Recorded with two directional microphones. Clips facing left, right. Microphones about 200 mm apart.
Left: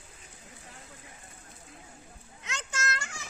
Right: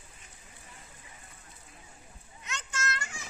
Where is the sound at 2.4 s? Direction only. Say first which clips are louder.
Left 1 dB; 90° left.